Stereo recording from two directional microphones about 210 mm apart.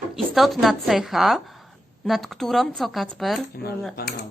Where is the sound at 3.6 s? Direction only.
50° left (ahead or behind).